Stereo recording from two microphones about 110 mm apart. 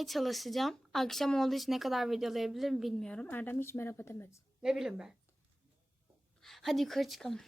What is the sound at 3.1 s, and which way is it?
A child's voice, 10° left (ahead or behind).